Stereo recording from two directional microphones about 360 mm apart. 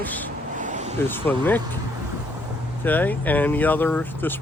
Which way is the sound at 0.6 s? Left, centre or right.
Centre.